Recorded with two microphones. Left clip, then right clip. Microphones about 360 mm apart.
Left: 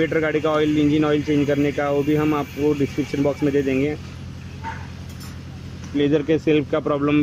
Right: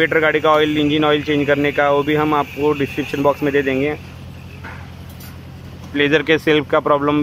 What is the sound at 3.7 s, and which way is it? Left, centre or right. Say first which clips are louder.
Speech: right 3 dB; right.